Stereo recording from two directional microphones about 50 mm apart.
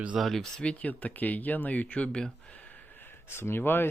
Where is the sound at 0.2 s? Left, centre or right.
Centre.